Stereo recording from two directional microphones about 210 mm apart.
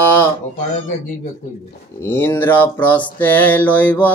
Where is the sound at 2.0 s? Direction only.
10° left (ahead or behind).